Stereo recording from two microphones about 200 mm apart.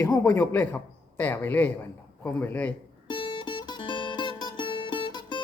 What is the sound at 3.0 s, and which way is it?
Music, 25° left (ahead or behind).